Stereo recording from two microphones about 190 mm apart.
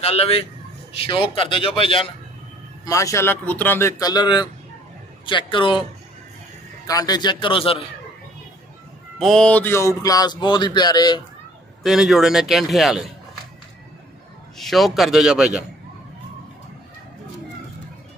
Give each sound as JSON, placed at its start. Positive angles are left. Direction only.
{"t": 0.0, "sound": "a man's voice", "side_deg": 30}
{"t": 2.8, "sound": "a man's voice", "side_deg": 15}
{"t": 6.9, "sound": "speech", "side_deg": 20}
{"t": 9.2, "sound": "speech", "side_deg": 5}
{"t": 11.8, "sound": "speech", "side_deg": 0}
{"t": 14.6, "sound": "speech", "side_deg": 0}